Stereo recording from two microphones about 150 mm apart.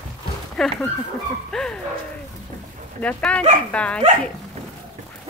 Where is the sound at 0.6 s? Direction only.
Centre (ahead or behind).